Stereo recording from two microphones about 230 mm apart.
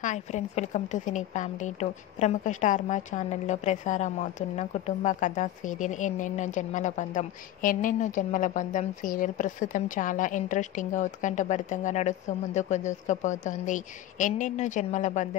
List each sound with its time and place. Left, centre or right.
0.0 s a woman's voice: left